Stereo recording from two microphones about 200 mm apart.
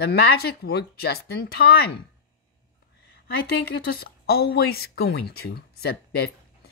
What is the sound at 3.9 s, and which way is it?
Speech, 50° left (ahead or behind).